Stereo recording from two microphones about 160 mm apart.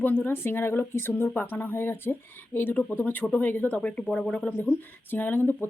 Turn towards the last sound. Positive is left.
turn(degrees=10)  # may be behind; listen again after turning